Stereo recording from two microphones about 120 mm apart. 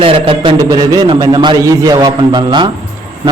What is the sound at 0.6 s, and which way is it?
A man's voice, 30° right (ahead or behind).